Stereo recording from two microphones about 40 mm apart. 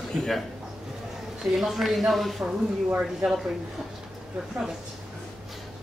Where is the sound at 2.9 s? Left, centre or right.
Centre.